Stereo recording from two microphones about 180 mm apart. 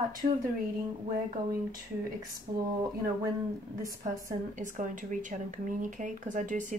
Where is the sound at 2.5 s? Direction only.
20° right (ahead or behind).